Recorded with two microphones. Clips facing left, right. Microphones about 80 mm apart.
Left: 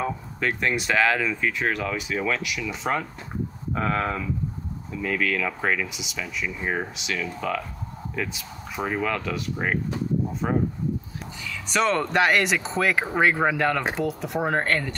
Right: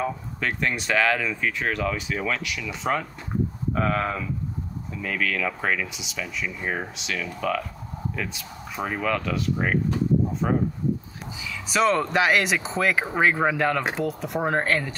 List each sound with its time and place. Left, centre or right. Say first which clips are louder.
0.0 s speech: left 1 dB; centre
5.0 s speech: left 1 dB; centre
11.7 s speech: right 1 dB; centre